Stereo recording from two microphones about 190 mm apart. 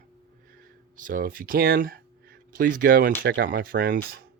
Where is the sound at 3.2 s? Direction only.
65° right (ahead or behind).